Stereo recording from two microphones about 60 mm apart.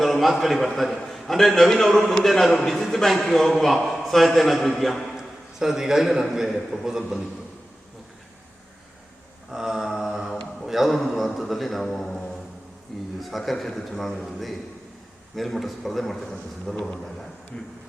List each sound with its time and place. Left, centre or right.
0.0 s a man's voice: centre
9.5 s mantra: centre
11.3 s a man's voice: centre
15.4 s a man's voice: centre